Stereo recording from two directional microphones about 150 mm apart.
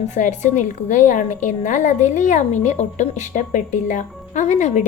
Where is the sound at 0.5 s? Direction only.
55° left (ahead or behind).